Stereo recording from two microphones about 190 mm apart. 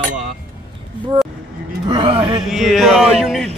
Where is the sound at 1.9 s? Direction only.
25° right (ahead or behind).